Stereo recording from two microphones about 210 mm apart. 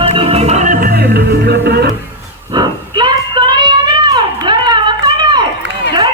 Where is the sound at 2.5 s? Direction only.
20° right (ahead or behind).